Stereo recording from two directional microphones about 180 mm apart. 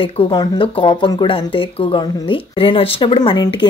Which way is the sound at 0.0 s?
25° left (ahead or behind).